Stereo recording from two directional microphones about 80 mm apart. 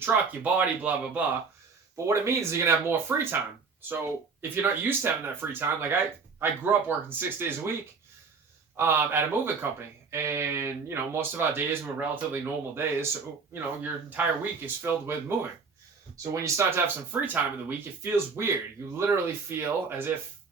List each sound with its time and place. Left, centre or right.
0.0 s speech: right
2.0 s speech: right
8.7 s speech: right